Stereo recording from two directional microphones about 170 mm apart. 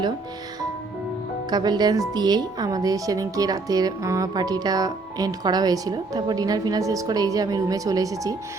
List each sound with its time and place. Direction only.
1.5 s speech: 25° right (ahead or behind)